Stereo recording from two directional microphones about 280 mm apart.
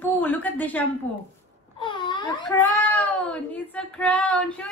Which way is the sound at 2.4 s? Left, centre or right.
Centre.